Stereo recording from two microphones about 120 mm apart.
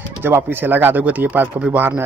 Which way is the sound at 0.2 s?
15° right (ahead or behind).